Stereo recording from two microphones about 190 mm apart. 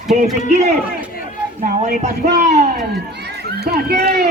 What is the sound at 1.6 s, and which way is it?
A man's voice, 45° right (ahead or behind).